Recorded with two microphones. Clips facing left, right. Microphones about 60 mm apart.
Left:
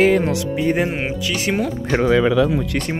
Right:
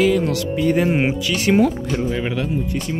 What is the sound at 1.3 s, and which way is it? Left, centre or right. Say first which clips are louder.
Speech: right 6 dB; centre.